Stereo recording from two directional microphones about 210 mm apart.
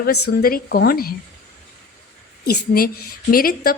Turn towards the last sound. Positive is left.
turn(degrees=45)  # may be behind; listen again after turning